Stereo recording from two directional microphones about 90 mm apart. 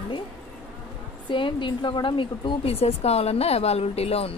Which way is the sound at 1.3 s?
65° left (ahead or behind).